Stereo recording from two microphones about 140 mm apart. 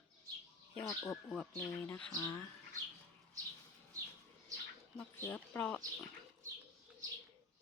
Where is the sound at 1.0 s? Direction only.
5° left (ahead or behind).